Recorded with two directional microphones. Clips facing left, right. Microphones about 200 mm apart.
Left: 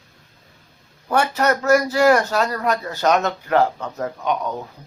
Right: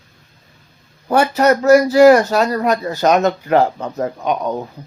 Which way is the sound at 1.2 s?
15° right (ahead or behind).